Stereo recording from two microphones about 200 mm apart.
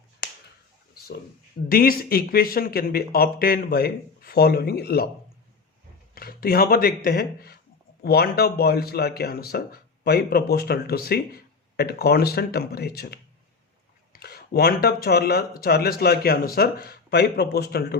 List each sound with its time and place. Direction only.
1.7 s speech: 45° left (ahead or behind)
6.1 s speech: 50° left (ahead or behind)